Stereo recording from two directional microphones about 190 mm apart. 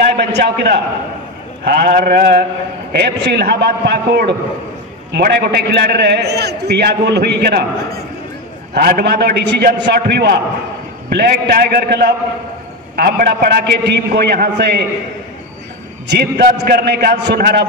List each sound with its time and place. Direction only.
0.1 s a man's voice: 60° right (ahead or behind)
8.7 s a man's voice: 55° right (ahead or behind)
16.1 s a man's voice: 60° right (ahead or behind)